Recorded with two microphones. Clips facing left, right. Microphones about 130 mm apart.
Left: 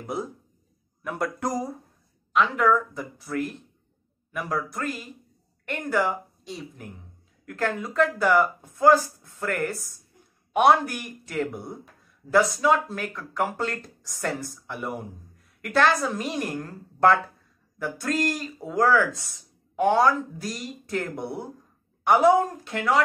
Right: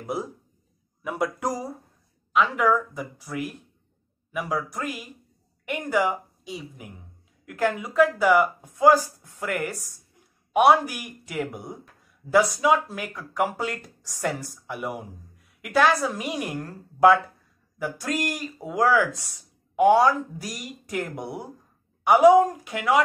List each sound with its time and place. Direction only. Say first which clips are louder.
0.0 s speech: right 1 dB; 5° right (ahead or behind)